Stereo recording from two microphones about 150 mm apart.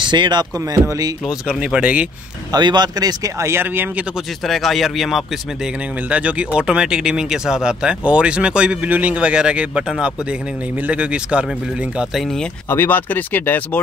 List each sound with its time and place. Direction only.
0.0 s speech: 30° right (ahead or behind)
1.5 s speech: 5° right (ahead or behind)
2.5 s speech: 30° right (ahead or behind)
4.5 s speech: centre (ahead or behind)
12.6 s speech: 15° left (ahead or behind)